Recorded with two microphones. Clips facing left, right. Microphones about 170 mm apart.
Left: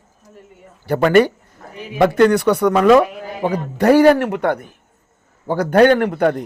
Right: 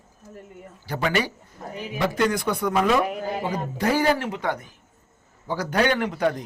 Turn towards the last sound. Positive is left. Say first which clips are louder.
# left 7 dB
turn(degrees=60)  # may be behind; listen again after turning